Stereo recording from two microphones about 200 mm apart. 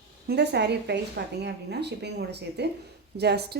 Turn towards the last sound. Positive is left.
turn(degrees=-55)  # may be behind; listen again after turning